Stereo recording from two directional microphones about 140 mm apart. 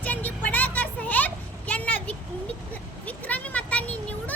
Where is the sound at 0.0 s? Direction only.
10° left (ahead or behind).